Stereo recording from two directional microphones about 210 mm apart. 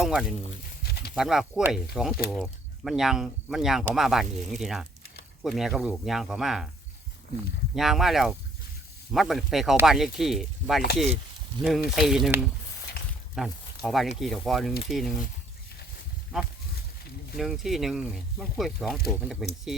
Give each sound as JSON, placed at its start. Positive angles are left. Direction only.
{"t": 0.0, "sound": "speech", "side_deg": 0}
{"t": 0.8, "sound": "a sound", "side_deg": 50}
{"t": 1.1, "sound": "speech", "side_deg": 0}
{"t": 7.8, "sound": "speech", "side_deg": 0}
{"t": 17.3, "sound": "speech", "side_deg": 0}